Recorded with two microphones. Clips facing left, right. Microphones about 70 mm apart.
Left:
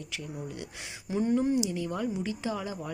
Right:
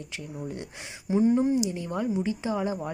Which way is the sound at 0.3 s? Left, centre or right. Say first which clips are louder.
Right 6 dB; right.